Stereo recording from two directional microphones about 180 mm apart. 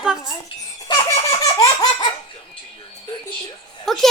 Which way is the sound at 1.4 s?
20° left (ahead or behind).